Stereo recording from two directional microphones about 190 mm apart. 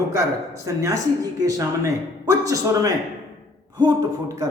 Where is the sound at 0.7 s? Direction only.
15° right (ahead or behind).